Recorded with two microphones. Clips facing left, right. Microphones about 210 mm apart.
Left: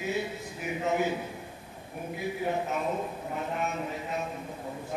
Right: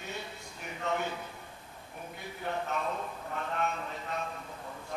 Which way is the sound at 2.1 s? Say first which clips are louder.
Left 6 dB; 5° left (ahead or behind).